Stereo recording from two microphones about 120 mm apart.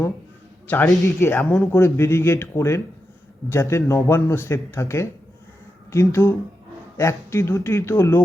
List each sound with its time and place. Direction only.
0.7 s speech: 15° left (ahead or behind)